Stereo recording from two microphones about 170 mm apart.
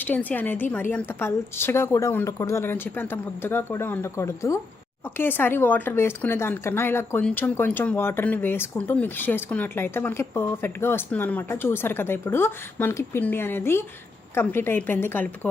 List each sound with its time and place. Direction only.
0.0 s speech: 10° left (ahead or behind)